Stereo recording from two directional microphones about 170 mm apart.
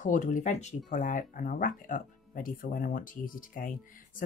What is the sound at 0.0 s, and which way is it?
Speech, 50° left (ahead or behind).